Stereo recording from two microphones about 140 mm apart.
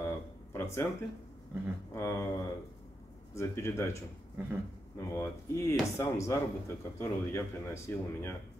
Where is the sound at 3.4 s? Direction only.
20° left (ahead or behind).